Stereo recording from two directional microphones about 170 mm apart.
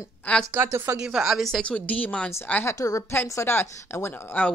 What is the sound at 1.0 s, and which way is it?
Speech, 5° right (ahead or behind).